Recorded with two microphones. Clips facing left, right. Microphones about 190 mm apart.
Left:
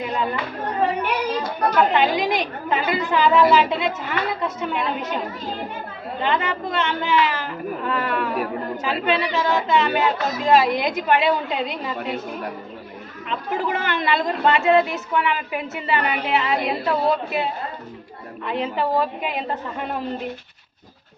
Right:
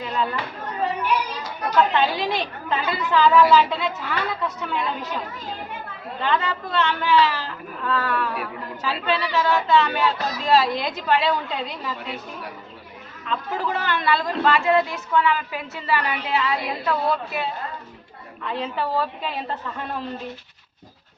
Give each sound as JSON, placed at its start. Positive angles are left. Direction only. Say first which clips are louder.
{"t": 0.0, "sound": "a sound", "louder": "left 1 dB", "side_deg": 20}
{"t": 1.0, "sound": "a child's voice", "louder": "left 2 dB", "side_deg": 55}
{"t": 1.9, "sound": "a woman's voice", "louder": "left 3 dB", "side_deg": 15}
{"t": 6.2, "sound": "a woman's voice", "louder": "left 1 dB", "side_deg": 20}
{"t": 8.4, "sound": "a woman's voice", "louder": "left 7 dB", "side_deg": 45}
{"t": 9.0, "sound": "a woman's voice", "louder": "even", "side_deg": 20}
{"t": 13.2, "sound": "a woman's voice", "louder": "left 2 dB", "side_deg": 20}
{"t": 18.4, "sound": "a woman's voice", "louder": "left 3 dB", "side_deg": 15}